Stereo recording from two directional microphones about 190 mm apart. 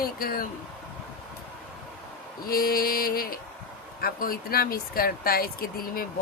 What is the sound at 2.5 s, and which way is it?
Speech, 50° left (ahead or behind).